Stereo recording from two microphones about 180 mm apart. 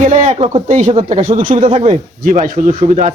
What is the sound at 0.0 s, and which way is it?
Speech, 40° right (ahead or behind).